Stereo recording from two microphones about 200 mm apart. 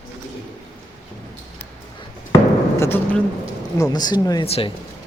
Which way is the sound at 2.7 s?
10° left (ahead or behind).